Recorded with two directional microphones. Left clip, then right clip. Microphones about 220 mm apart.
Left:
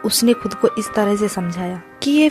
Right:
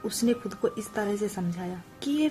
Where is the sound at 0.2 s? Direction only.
40° left (ahead or behind).